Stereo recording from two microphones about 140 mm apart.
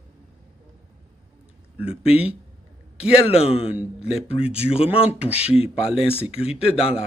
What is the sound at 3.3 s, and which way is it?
Speech, 45° left (ahead or behind).